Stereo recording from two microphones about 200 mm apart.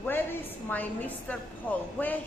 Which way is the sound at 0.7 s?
10° left (ahead or behind).